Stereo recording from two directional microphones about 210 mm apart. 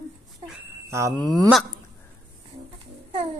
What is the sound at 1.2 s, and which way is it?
Speech, 20° left (ahead or behind).